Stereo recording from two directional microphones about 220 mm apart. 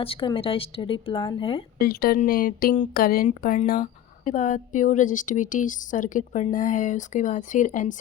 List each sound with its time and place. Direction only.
0.0 s a woman's voice: 25° left (ahead or behind)
1.8 s a woman's voice: 45° left (ahead or behind)